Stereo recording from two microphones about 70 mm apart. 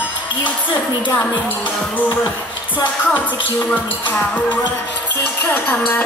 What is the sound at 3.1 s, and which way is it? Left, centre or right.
Speech, left.